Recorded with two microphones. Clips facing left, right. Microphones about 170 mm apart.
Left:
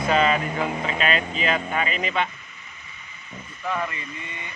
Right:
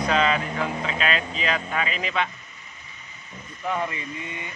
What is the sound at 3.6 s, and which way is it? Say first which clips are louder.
Speech: right 1 dB; 20° right (ahead or behind).